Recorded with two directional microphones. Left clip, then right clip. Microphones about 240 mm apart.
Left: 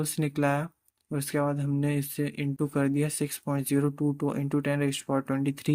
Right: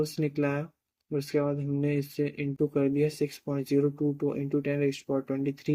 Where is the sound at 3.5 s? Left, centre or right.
Left.